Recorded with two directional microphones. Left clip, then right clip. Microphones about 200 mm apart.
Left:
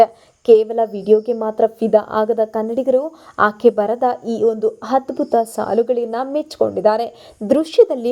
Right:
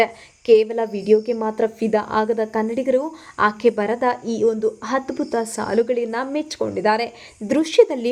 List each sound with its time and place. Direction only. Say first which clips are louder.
0.0 s a woman's voice: left 6 dB; 5° left (ahead or behind)